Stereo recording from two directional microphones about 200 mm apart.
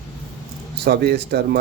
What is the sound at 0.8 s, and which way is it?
Speech, 55° right (ahead or behind).